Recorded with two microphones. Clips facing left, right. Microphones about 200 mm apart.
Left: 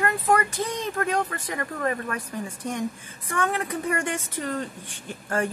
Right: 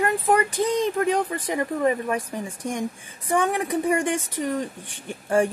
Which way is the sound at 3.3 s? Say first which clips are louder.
Right 4 dB; 15° right (ahead or behind).